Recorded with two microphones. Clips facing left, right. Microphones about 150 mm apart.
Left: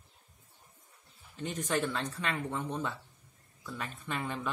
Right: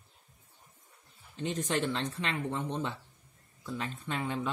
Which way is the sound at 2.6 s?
20° right (ahead or behind).